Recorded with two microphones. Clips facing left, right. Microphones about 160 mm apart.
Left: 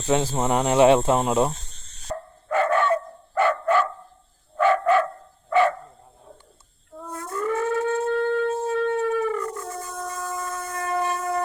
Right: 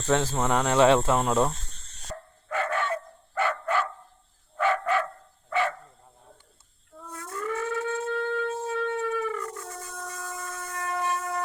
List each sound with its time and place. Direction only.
0.0 s speech: 10° left (ahead or behind)
0.3 s speech: 20° left (ahead or behind)
2.1 s dog: 40° left (ahead or behind)
7.1 s civil defense siren: 45° left (ahead or behind)